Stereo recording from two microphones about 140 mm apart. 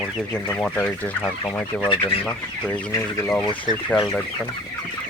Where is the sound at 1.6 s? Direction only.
5° left (ahead or behind).